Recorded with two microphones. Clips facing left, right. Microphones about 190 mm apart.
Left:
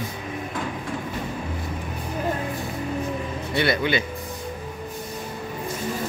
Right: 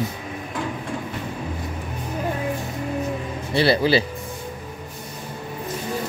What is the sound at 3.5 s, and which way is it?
Speech, 30° right (ahead or behind).